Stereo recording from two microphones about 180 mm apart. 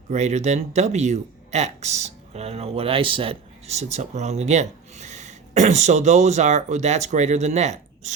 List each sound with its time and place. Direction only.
0.1 s speech: 40° right (ahead or behind)